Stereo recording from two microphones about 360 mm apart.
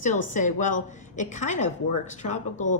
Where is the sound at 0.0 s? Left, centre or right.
Left.